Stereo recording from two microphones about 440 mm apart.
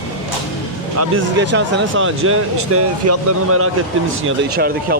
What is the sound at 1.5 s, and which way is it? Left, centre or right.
Speech, right.